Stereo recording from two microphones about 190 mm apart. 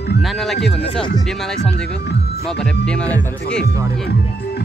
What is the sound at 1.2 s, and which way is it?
Speech, centre (ahead or behind).